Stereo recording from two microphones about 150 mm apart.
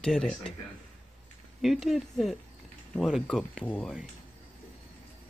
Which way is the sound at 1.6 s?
Centre (ahead or behind).